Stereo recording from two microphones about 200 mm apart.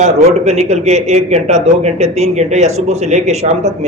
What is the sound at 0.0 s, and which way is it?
A man's voice, 35° right (ahead or behind).